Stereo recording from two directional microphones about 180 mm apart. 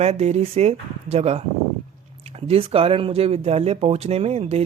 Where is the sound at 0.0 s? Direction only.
35° right (ahead or behind).